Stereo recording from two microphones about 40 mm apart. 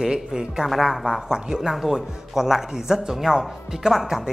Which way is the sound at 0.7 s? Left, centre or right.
Centre.